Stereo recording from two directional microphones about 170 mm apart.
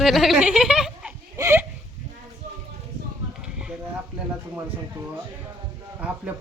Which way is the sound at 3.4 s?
5° right (ahead or behind).